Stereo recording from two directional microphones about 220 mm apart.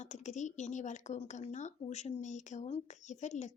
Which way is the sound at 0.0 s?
30° left (ahead or behind).